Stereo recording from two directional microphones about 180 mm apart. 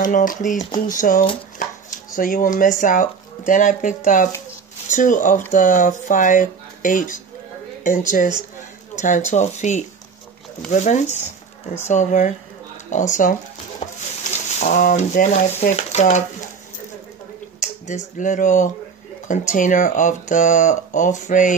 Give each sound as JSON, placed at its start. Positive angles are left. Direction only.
{"t": 0.0, "sound": "speech", "side_deg": 50}
{"t": 17.6, "sound": "speech", "side_deg": 45}